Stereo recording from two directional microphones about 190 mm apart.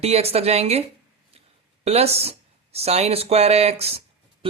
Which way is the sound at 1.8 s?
35° right (ahead or behind).